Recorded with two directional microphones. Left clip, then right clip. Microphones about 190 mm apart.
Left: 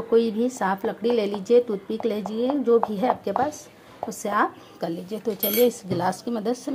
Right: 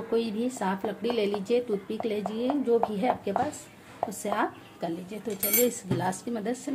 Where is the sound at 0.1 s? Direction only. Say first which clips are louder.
Left 8 dB; 20° left (ahead or behind).